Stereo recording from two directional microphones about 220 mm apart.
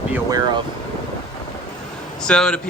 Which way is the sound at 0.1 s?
15° right (ahead or behind).